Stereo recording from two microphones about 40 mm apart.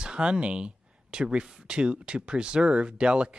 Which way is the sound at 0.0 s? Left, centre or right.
Right.